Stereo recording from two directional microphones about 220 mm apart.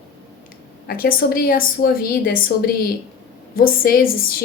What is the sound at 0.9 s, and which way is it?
A woman's voice, 40° left (ahead or behind).